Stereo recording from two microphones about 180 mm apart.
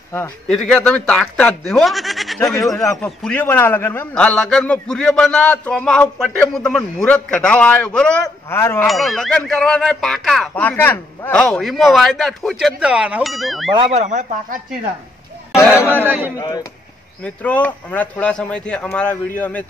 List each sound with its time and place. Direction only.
0.5 s a man's voice: 5° left (ahead or behind)
8.8 s speech: centre (ahead or behind)
13.7 s speech: 40° right (ahead or behind)
15.5 s a man's voice: 15° left (ahead or behind)
16.1 s speech: 10° right (ahead or behind)
16.3 s speech: 20° left (ahead or behind)
17.2 s a man's voice: 10° left (ahead or behind)